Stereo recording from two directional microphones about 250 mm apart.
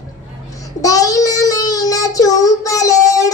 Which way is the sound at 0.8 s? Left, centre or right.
Centre.